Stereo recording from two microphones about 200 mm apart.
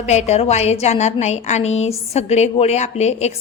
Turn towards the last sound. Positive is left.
turn(degrees=35)  # may be behind; listen again after turning